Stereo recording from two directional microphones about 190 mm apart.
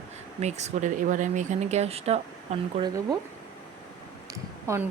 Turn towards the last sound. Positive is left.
turn(degrees=-15)  # may be behind; listen again after turning